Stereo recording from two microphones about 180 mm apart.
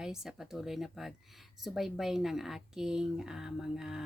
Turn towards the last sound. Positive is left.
turn(degrees=-5)  # may be behind; listen again after turning